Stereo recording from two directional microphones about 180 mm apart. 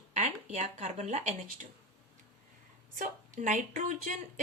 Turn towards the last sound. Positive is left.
turn(degrees=-45)  # may be behind; listen again after turning